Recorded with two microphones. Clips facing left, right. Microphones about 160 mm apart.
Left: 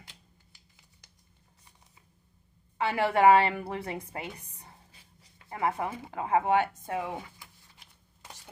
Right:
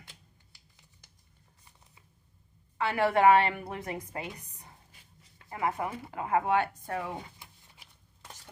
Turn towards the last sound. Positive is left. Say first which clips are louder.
# left 2 dB
turn(degrees=20)  # may be behind; listen again after turning